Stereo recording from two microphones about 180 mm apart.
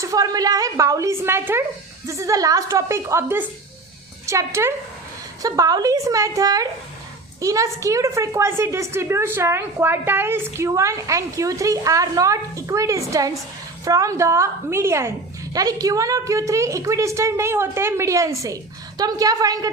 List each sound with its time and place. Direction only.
0.0 s a woman's voice: 20° right (ahead or behind)